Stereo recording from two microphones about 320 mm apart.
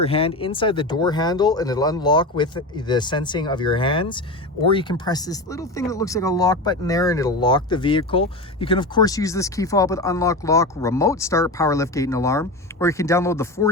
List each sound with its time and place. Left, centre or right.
0.0 s speech: centre